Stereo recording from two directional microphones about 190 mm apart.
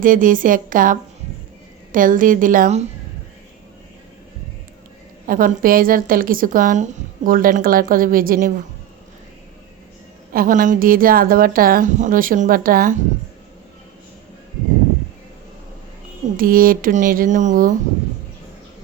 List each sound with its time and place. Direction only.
0.0 s a woman's voice: 45° right (ahead or behind)
5.2 s a woman's voice: 50° right (ahead or behind)
10.3 s a woman's voice: 45° right (ahead or behind)
16.4 s a woman's voice: 50° right (ahead or behind)